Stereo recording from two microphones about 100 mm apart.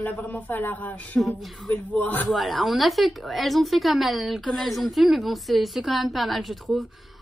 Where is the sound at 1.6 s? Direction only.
15° left (ahead or behind).